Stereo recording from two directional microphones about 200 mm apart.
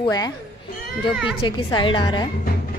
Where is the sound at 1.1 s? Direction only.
5° right (ahead or behind).